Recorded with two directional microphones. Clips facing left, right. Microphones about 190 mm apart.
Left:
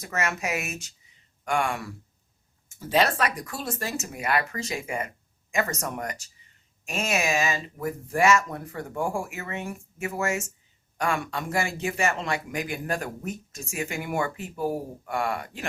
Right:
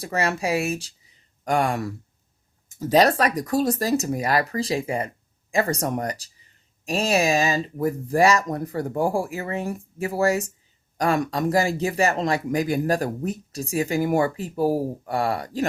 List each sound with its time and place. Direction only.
0.0 s speech: 35° right (ahead or behind)